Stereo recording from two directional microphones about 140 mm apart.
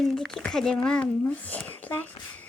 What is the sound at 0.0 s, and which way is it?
Speech, centre (ahead or behind).